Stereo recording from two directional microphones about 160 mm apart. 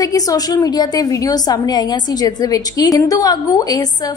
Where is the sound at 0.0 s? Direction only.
20° left (ahead or behind).